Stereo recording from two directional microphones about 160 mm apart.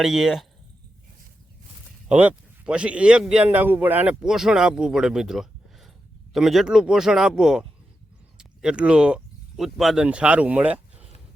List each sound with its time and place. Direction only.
0.0 s speech: centre (ahead or behind)
2.0 s speech: 5° right (ahead or behind)